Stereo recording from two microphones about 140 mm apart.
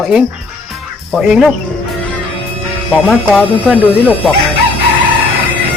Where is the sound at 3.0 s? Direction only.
5° right (ahead or behind).